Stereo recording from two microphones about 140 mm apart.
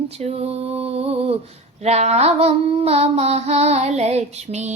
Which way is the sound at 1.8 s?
50° right (ahead or behind).